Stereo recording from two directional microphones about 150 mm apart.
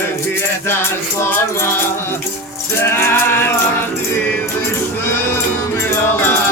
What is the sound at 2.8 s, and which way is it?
Music, 15° left (ahead or behind).